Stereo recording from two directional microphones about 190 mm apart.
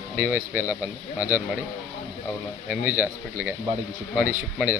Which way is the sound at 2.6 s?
10° right (ahead or behind).